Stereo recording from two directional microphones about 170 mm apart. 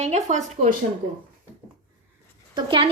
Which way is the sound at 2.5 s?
30° right (ahead or behind).